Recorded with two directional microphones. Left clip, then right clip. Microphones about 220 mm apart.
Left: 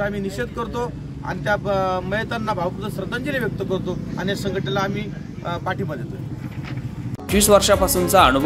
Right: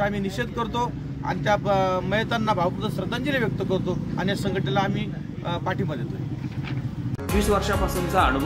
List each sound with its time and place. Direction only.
0.0 s speech: 5° right (ahead or behind)
7.3 s speech: 50° left (ahead or behind)